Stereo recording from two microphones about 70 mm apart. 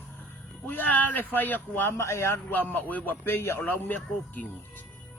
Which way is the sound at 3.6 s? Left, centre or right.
Left.